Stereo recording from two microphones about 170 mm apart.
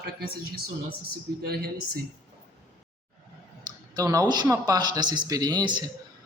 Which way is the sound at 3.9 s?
20° right (ahead or behind).